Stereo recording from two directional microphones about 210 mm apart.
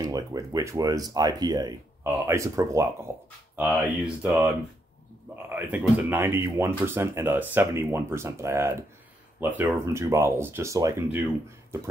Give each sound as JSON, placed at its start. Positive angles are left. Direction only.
{"t": 0.0, "sound": "speech", "side_deg": -15}